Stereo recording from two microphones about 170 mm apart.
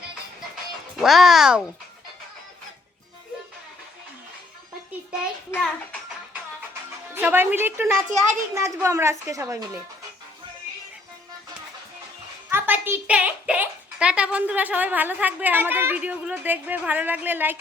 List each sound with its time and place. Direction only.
0.9 s speech: centre (ahead or behind)
5.5 s a child's voice: 10° left (ahead or behind)
7.1 s a woman's voice: 10° right (ahead or behind)
12.5 s a child's voice: 10° right (ahead or behind)